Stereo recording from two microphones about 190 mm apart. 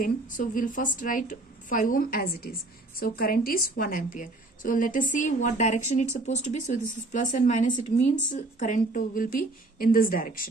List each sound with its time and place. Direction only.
0.0 s speech: 45° left (ahead or behind)